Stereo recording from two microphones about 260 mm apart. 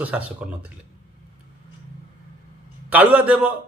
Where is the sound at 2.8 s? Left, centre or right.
Centre.